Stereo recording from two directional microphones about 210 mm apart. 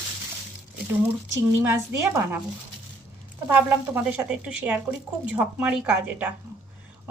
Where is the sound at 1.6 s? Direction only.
10° right (ahead or behind).